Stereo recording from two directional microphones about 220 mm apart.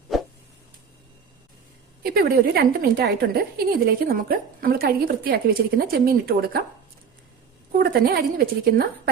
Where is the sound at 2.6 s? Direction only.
45° right (ahead or behind).